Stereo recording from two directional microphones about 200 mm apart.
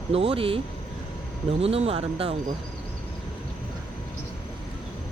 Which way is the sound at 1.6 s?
30° right (ahead or behind).